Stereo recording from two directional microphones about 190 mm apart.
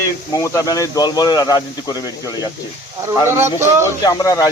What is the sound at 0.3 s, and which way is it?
Speech, 15° left (ahead or behind).